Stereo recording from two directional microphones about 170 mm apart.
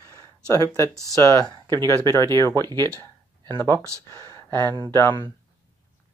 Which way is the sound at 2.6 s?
25° right (ahead or behind).